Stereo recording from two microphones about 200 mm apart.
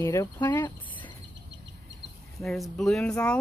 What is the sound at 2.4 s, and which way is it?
Speech, centre (ahead or behind).